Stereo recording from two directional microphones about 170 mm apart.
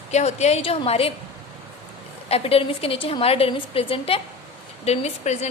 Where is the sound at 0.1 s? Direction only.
40° left (ahead or behind).